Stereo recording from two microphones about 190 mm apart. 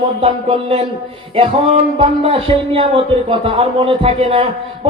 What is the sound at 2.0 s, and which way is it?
A man's voice, 30° right (ahead or behind).